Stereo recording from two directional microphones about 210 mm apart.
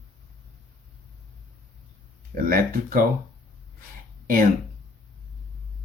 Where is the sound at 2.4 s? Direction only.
40° right (ahead or behind).